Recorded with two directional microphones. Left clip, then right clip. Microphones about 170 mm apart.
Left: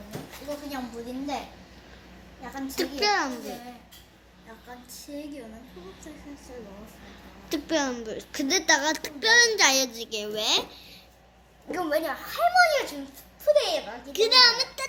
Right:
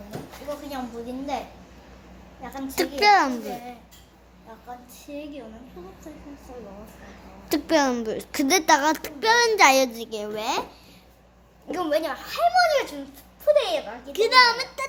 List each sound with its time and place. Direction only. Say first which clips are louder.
2.6 s a child's voice: right 4 dB; 60° right (ahead or behind)
7.4 s a child's voice: right 6 dB; 65° right (ahead or behind); by 10.7 s 35° right (ahead or behind)
11.7 s a child's voice: right 2 dB; 15° right (ahead or behind); by 13.8 s centre (ahead or behind)
14.1 s a child's voice: right 2 dB; 55° right (ahead or behind)